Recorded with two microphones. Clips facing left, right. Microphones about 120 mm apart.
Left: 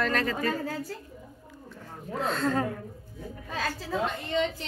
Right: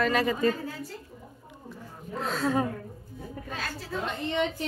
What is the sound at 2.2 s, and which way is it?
Speech, 5° right (ahead or behind).